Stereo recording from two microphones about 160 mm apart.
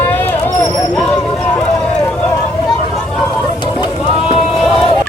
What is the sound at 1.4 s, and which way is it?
Vehicle, 10° left (ahead or behind).